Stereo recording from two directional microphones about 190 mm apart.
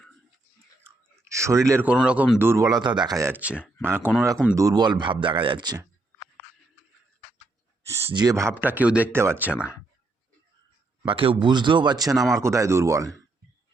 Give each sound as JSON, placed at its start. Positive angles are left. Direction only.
{"t": 1.2, "sound": "speech", "side_deg": -15}
{"t": 3.5, "sound": "speech", "side_deg": 10}
{"t": 3.8, "sound": "speech", "side_deg": -10}
{"t": 7.9, "sound": "speech", "side_deg": -20}
{"t": 11.0, "sound": "speech", "side_deg": -30}